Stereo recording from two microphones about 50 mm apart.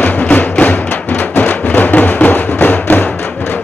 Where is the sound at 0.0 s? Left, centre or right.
Left.